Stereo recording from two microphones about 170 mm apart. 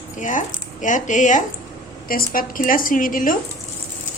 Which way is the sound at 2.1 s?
55° left (ahead or behind).